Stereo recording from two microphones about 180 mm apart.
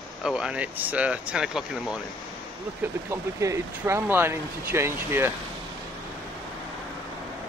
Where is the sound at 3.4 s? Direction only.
15° right (ahead or behind).